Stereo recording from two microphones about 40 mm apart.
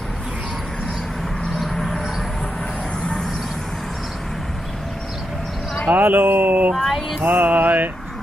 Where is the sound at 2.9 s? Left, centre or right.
Centre.